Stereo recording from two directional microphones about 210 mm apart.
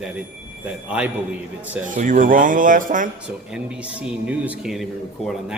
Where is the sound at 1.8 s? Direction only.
40° right (ahead or behind).